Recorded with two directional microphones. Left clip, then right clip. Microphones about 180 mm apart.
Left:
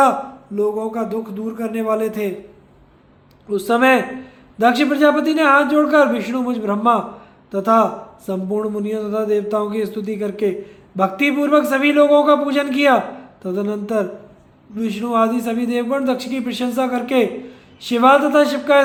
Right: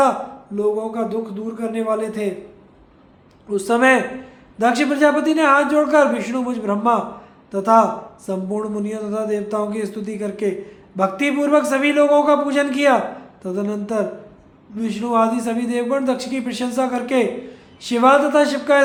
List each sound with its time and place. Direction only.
0.5 s a man's voice: 25° left (ahead or behind)
3.5 s a man's voice: 15° left (ahead or behind)